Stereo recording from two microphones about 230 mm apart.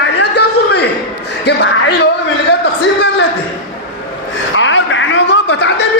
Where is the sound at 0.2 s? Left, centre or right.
Left.